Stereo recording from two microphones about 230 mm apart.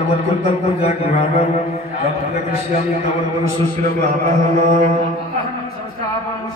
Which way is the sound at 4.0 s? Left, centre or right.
Right.